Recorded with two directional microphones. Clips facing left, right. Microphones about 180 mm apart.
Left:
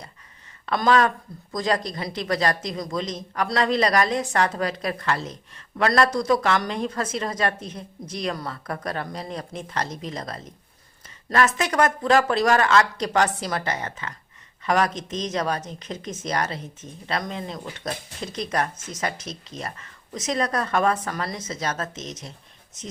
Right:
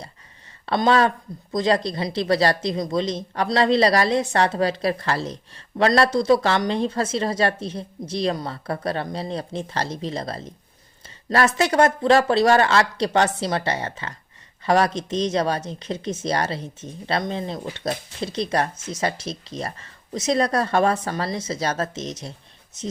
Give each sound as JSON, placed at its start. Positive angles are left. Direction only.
{"t": 0.6, "sound": "speech", "side_deg": -30}